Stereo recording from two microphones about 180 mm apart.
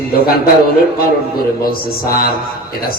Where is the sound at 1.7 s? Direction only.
55° left (ahead or behind).